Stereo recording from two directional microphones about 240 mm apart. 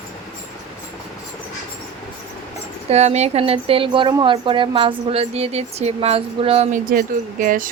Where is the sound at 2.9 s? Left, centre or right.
Right.